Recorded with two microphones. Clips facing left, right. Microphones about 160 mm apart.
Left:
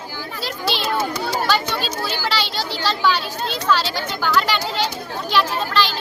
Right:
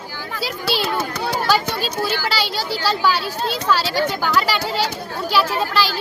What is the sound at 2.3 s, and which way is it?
Speech, 10° right (ahead or behind).